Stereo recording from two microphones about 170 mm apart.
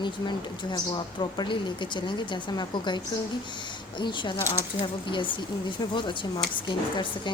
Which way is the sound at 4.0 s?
25° left (ahead or behind).